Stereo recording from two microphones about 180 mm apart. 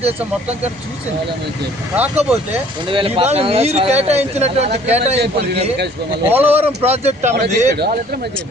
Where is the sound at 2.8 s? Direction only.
30° right (ahead or behind).